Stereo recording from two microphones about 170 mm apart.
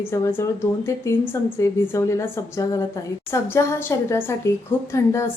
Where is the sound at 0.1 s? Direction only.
15° left (ahead or behind).